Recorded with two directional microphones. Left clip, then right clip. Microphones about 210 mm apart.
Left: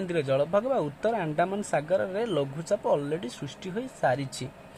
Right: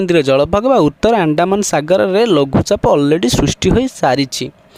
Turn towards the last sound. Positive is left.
turn(degrees=-50)  # may be behind; listen again after turning